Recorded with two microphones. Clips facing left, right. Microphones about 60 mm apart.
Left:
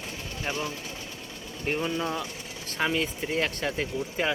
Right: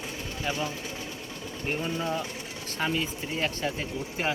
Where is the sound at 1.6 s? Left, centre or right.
Left.